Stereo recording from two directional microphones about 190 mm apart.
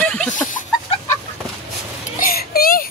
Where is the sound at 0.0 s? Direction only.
10° left (ahead or behind).